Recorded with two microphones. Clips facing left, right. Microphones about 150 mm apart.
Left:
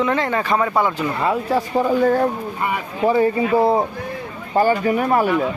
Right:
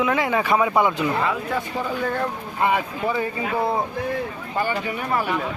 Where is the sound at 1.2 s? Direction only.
35° left (ahead or behind).